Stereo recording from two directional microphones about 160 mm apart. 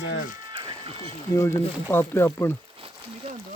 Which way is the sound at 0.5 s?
30° right (ahead or behind).